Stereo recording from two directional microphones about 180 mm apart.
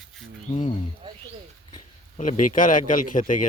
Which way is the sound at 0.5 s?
40° left (ahead or behind).